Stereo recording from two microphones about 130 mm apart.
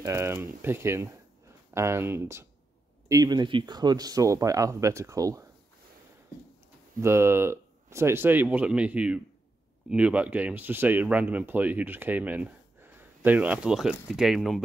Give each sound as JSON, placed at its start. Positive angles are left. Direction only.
{"t": 0.0, "sound": "speech", "side_deg": -20}
{"t": 3.1, "sound": "speech", "side_deg": -30}
{"t": 7.0, "sound": "speech", "side_deg": -20}